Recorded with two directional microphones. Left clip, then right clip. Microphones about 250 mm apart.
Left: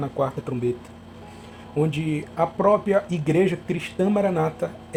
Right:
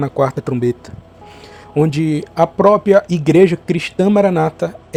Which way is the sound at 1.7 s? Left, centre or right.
Right.